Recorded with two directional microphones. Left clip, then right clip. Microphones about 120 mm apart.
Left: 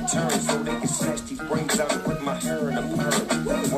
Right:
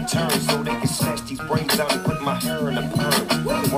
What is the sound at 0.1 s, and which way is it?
Music, 25° right (ahead or behind).